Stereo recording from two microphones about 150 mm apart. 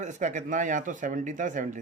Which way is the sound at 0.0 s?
55° right (ahead or behind).